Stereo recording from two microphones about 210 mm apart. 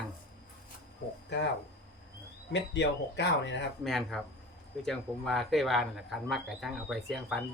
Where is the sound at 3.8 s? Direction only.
Centre (ahead or behind).